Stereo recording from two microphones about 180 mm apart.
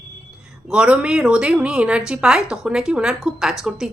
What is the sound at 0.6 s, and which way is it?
A woman's voice, 5° right (ahead or behind).